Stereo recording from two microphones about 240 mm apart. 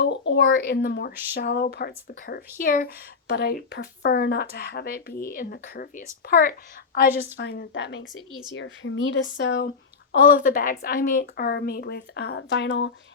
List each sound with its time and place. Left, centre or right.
0.0 s a woman's voice: left
10.3 s speech: left